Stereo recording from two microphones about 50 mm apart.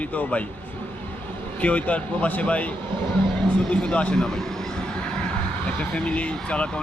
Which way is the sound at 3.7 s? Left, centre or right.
Left.